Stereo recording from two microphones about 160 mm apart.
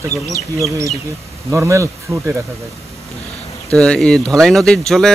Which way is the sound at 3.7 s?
5° left (ahead or behind).